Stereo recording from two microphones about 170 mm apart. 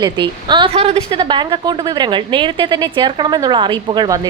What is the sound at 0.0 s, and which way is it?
A woman's voice, 25° right (ahead or behind).